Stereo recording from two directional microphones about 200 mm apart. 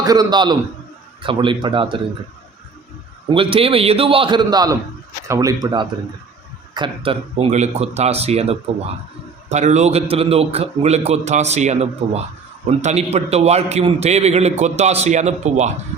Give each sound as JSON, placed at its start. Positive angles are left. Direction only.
{"t": 0.0, "sound": "a man's voice", "side_deg": -20}
{"t": 3.2, "sound": "a man's voice", "side_deg": -25}
{"t": 6.7, "sound": "a man's voice", "side_deg": -25}